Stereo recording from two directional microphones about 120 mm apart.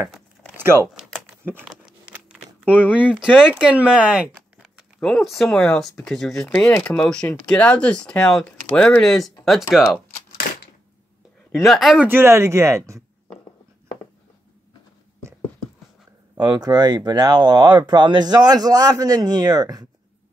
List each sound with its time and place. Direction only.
0.8 s a sound: 5° right (ahead or behind)
1.4 s speech: 15° right (ahead or behind)
1.9 s patter: 10° right (ahead or behind)
2.6 s speech: 15° left (ahead or behind)
3.2 s speech: 10° right (ahead or behind)
11.6 s speech: centre (ahead or behind)
12.1 s speech: 20° right (ahead or behind)
16.3 s speech: 35° right (ahead or behind)